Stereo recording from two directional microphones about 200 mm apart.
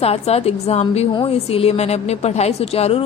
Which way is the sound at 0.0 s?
30° left (ahead or behind).